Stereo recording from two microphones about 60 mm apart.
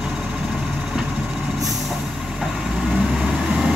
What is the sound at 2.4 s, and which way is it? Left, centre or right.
Vehicle, centre.